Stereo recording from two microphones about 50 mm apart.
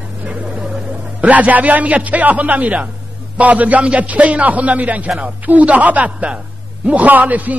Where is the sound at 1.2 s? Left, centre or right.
Right.